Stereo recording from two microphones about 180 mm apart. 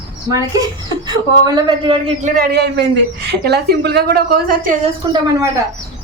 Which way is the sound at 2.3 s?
55° right (ahead or behind).